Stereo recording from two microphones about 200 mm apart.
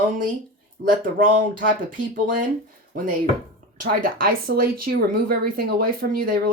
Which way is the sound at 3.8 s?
45° right (ahead or behind).